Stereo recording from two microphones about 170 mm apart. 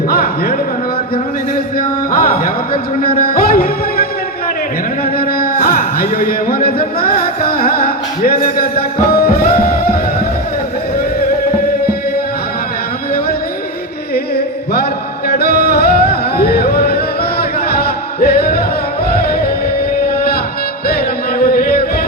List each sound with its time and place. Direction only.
0.1 s music: 60° left (ahead or behind)
2.1 s music: 60° left (ahead or behind)
5.1 s music: 65° left (ahead or behind)
14.3 s music: 70° left (ahead or behind)
20.8 s music: 65° left (ahead or behind)